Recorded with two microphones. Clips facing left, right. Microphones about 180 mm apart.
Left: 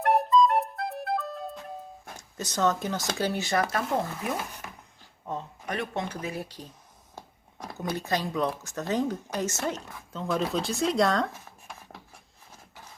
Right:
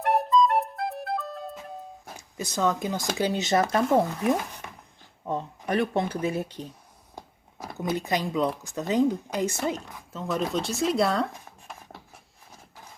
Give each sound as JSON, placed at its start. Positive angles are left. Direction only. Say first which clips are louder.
{"t": 0.0, "sound": "music", "louder": "even", "side_deg": 0}
{"t": 5.3, "sound": "speech", "louder": "right 6 dB", "side_deg": -35}
{"t": 7.8, "sound": "speech", "louder": "right 2 dB", "side_deg": -15}
{"t": 10.2, "sound": "speech", "louder": "even", "side_deg": 0}
{"t": 11.7, "sound": "a sound", "louder": "right 2 dB", "side_deg": 0}